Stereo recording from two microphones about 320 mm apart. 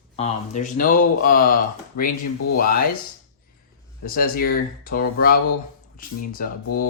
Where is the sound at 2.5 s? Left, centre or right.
Left.